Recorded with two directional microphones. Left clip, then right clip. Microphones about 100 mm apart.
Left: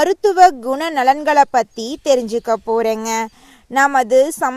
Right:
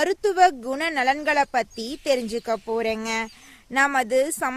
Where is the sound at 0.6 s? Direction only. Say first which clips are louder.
Left 6 dB; 40° left (ahead or behind); by 3.3 s 60° left (ahead or behind).